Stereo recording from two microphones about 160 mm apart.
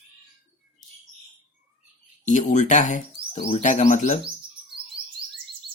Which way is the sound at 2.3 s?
50° left (ahead or behind).